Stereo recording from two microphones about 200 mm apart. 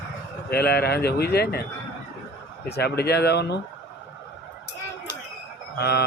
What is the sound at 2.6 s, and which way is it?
Speech, 55° left (ahead or behind).